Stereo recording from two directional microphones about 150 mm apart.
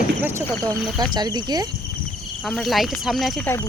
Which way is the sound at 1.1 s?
30° right (ahead or behind).